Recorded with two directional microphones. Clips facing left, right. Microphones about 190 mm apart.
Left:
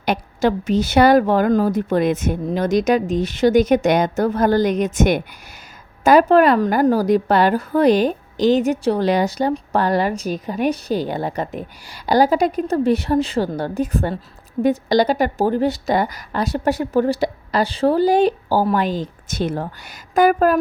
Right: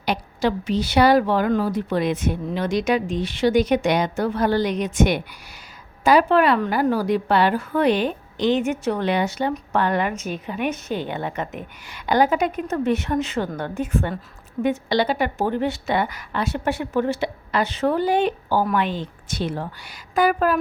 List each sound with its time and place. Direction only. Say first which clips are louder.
0.0 s a woman's voice: left 4 dB; 50° left (ahead or behind)